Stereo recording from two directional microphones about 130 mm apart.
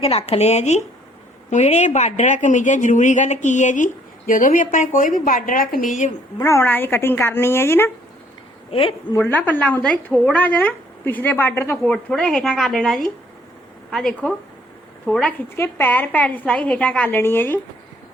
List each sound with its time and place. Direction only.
0.0 s a woman's voice: 50° left (ahead or behind); by 3.8 s 70° left (ahead or behind)
4.3 s a woman's voice: 90° left
6.4 s a woman's voice: 20° left (ahead or behind)
8.7 s a woman's voice: 45° left (ahead or behind)
9.1 s a woman's voice: 15° left (ahead or behind)
11.9 s a woman's voice: 5° left (ahead or behind)